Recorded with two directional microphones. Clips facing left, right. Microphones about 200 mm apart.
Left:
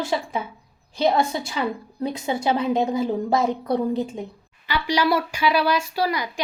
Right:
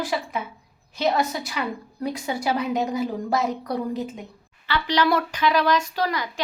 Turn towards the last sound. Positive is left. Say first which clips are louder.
# left 2 dB
turn(degrees=10)  # may be behind; listen again after turning